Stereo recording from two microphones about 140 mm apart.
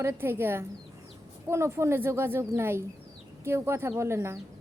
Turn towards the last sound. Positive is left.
turn(degrees=-20)  # may be behind; listen again after turning